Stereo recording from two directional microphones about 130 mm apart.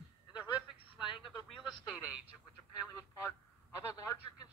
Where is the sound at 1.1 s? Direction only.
40° left (ahead or behind).